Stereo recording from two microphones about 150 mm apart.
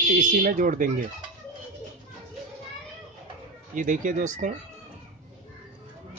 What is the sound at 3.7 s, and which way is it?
Speech, 60° right (ahead or behind).